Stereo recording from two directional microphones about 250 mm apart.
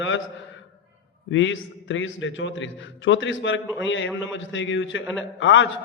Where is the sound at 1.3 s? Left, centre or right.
Left.